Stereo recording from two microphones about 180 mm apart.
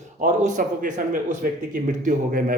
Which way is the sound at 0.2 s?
45° right (ahead or behind).